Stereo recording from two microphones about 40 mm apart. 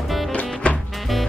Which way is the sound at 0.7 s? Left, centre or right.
Left.